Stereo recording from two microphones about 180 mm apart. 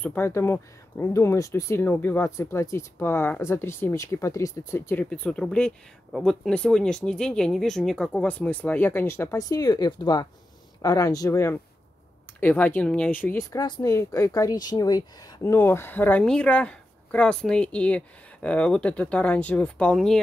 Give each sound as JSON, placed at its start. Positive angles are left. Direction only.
{"t": 0.0, "sound": "speech", "side_deg": 10}